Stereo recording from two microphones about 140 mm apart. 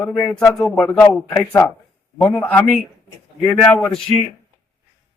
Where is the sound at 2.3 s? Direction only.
10° left (ahead or behind).